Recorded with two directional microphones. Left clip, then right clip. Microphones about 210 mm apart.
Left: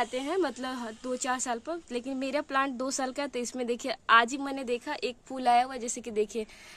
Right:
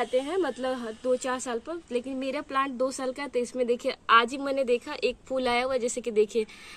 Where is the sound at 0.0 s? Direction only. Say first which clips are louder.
Right 3 dB; 55° left (ahead or behind).